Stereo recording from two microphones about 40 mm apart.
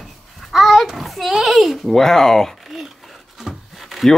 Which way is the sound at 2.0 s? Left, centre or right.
Centre.